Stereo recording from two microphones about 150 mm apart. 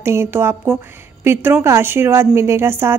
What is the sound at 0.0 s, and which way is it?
A woman's voice, 15° right (ahead or behind).